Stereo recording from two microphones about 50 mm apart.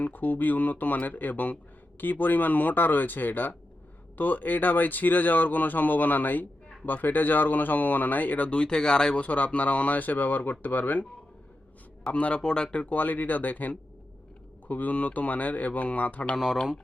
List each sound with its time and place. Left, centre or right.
0.0 s speech: left; by 9.2 s centre
9.2 s speech: left
12.1 s a man's voice: left
12.4 s speech: centre
12.7 s speech: left